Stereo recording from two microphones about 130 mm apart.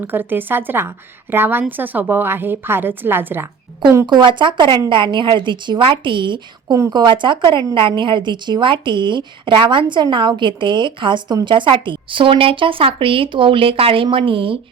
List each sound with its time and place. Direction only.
0.0 s a woman's voice: 15° right (ahead or behind)
4.0 s speech: 35° right (ahead or behind)